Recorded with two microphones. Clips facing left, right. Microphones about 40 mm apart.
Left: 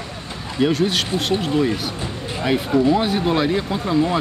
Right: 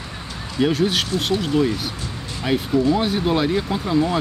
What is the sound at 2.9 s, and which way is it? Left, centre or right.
Speech, centre.